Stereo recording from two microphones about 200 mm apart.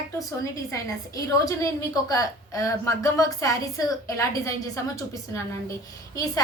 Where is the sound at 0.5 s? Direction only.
15° left (ahead or behind).